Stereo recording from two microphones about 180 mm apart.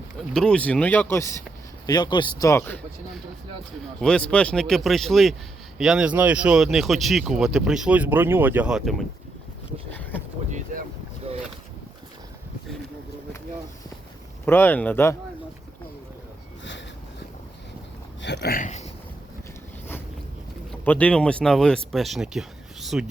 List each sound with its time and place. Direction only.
0.3 s speech: 5° left (ahead or behind)
4.0 s speech: 5° left (ahead or behind)
10.0 s speech: 10° left (ahead or behind)
10.7 s speech: 50° right (ahead or behind)
14.4 s speech: 10° left (ahead or behind)
18.2 s speech: 70° left (ahead or behind); by 18.9 s 40° left (ahead or behind)
20.8 s speech: 10° left (ahead or behind)